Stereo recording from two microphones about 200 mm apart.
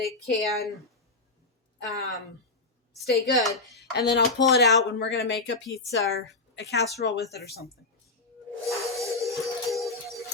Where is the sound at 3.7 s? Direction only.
55° left (ahead or behind).